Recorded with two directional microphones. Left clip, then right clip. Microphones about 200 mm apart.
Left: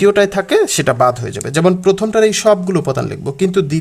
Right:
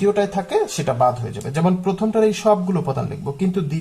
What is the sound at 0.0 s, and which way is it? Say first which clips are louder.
Speech: left 7 dB; 50° left (ahead or behind).